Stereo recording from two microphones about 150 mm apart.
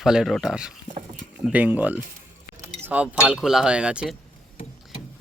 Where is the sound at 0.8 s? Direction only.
55° right (ahead or behind).